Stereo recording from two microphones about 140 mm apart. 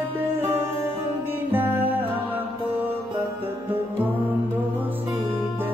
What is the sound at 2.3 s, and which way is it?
Mantra, 15° right (ahead or behind).